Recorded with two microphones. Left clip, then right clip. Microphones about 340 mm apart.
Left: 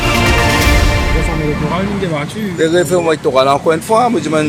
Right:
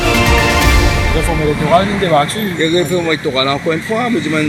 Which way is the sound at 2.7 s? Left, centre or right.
Left.